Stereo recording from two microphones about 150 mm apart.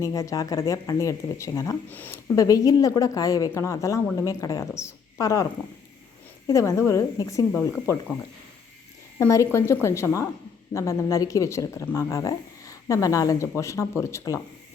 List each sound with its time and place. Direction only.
0.0 s speech: 20° left (ahead or behind)
6.5 s speech: 20° left (ahead or behind)
9.1 s speech: 20° left (ahead or behind)